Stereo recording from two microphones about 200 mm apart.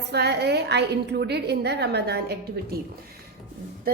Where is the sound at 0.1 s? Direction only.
55° right (ahead or behind).